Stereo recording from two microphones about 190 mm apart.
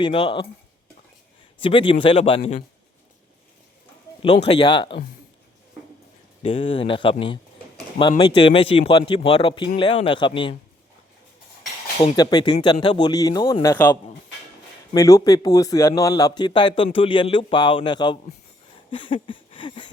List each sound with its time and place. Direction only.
0.0 s a man's voice: 25° left (ahead or behind)
1.6 s a man's voice: 25° left (ahead or behind)
4.4 s a man's voice: 25° left (ahead or behind)
6.4 s a man's voice: 30° left (ahead or behind)
12.0 s a man's voice: 20° left (ahead or behind)
18.9 s a sound: 25° left (ahead or behind)